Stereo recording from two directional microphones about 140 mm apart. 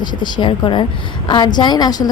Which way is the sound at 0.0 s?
30° left (ahead or behind).